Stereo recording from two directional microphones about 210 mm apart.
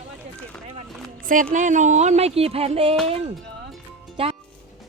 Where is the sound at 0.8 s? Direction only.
40° right (ahead or behind).